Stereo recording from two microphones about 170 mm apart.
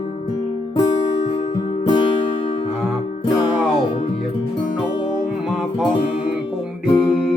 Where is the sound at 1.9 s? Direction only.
30° left (ahead or behind).